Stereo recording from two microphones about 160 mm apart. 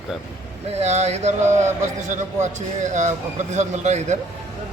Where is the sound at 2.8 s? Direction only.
50° right (ahead or behind).